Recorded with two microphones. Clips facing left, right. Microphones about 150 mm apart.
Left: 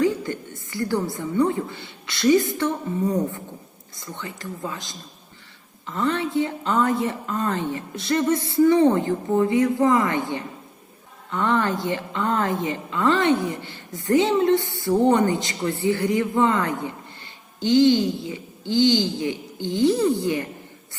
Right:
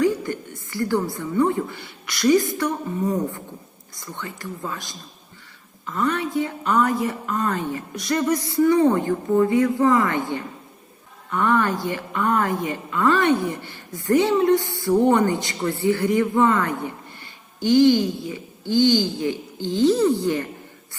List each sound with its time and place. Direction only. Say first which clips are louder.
0.0 s a sound: right 1 dB; 20° left (ahead or behind)
0.7 s a woman's voice: right 2 dB; 20° left (ahead or behind)
3.9 s a woman's voice: right 1 dB; 20° left (ahead or behind)